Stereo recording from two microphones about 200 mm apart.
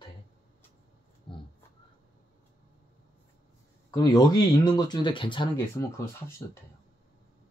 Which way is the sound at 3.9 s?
20° left (ahead or behind).